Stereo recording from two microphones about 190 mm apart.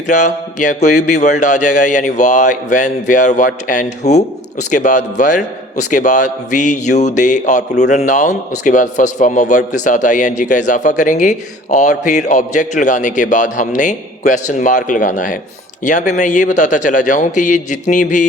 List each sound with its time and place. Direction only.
0.1 s speech: 40° left (ahead or behind)